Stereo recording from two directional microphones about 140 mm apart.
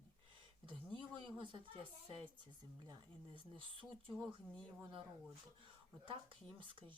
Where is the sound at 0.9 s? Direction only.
35° right (ahead or behind).